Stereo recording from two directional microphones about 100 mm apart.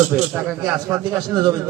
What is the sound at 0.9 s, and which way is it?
Speech, 35° right (ahead or behind).